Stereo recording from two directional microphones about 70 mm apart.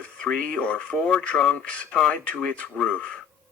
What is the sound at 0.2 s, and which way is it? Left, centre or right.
Speech, centre.